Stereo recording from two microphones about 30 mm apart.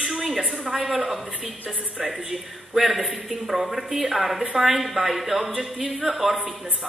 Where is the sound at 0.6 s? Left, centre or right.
Centre.